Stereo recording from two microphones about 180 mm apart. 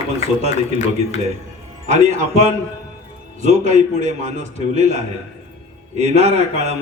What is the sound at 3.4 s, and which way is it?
A man's voice, 40° right (ahead or behind).